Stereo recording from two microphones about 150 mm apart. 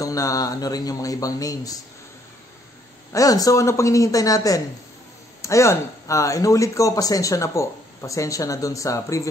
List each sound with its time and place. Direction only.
0.0 s speech: 20° left (ahead or behind)
3.1 s speech: 25° left (ahead or behind)